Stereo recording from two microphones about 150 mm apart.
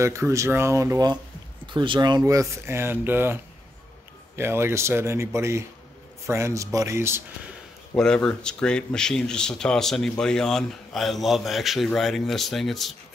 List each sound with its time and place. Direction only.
0.0 s speech: 20° right (ahead or behind)
4.4 s speech: 15° right (ahead or behind)
7.9 s speech: 5° left (ahead or behind)